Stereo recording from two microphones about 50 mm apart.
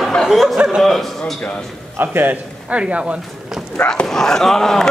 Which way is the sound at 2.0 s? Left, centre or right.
Right.